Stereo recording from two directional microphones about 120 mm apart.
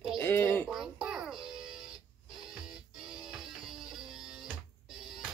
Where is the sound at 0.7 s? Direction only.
5° right (ahead or behind).